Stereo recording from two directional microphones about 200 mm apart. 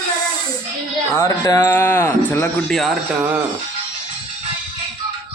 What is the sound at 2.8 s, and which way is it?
Speech, centre (ahead or behind).